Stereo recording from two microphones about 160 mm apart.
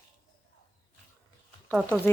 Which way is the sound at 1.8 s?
10° left (ahead or behind).